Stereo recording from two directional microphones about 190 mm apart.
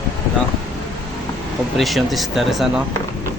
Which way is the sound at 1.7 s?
Centre (ahead or behind).